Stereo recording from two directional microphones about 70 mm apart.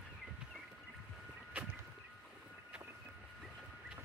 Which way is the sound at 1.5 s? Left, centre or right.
Right.